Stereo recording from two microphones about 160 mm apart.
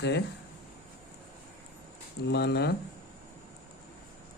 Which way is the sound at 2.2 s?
90° left.